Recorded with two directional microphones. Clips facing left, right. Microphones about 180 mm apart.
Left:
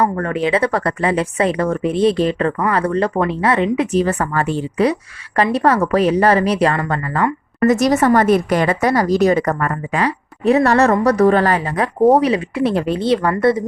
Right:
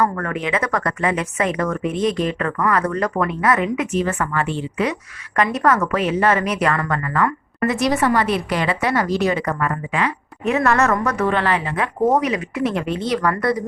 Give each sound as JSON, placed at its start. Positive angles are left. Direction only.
{"t": 0.0, "sound": "speech", "side_deg": 30}